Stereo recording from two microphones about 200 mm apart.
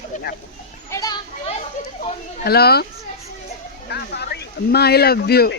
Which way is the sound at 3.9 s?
55° left (ahead or behind).